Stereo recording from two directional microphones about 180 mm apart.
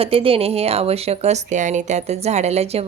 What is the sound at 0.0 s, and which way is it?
A woman's voice, 30° right (ahead or behind).